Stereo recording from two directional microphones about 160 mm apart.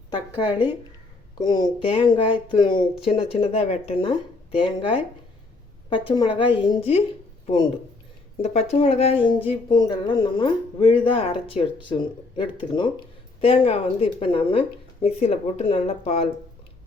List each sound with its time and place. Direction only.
0.3 s speech: 10° right (ahead or behind)
1.4 s speech: 25° left (ahead or behind)
5.9 s speech: 30° left (ahead or behind)
8.4 s speech: 40° left (ahead or behind)
9.5 s speech: 30° left (ahead or behind)